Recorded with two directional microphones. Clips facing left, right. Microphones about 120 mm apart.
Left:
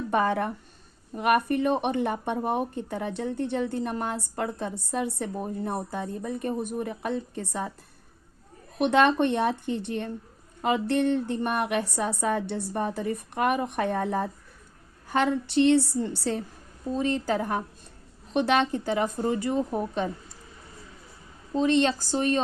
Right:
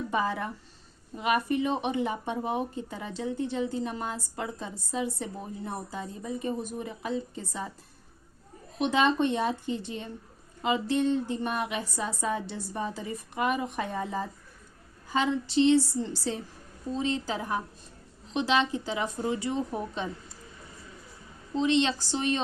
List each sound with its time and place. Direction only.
0.1 s speech: 60° left (ahead or behind)
8.8 s speech: 60° left (ahead or behind)
21.5 s speech: 45° left (ahead or behind)